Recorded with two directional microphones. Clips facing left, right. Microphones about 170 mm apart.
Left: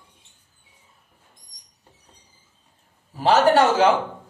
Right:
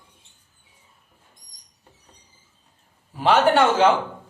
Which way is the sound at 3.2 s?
40° left (ahead or behind).